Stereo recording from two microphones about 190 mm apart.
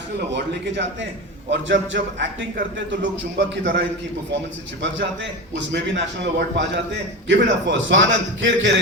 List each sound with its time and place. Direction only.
0.3 s a man's voice: 70° right (ahead or behind)